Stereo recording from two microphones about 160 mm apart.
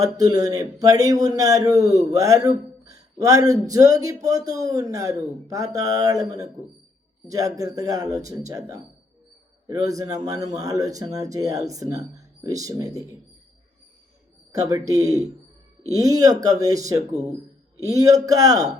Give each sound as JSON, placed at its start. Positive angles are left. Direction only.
{"t": 0.0, "sound": "speech", "side_deg": -25}
{"t": 14.5, "sound": "speech", "side_deg": -20}